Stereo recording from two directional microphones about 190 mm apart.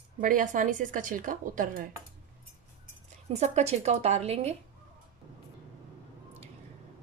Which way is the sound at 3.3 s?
35° right (ahead or behind).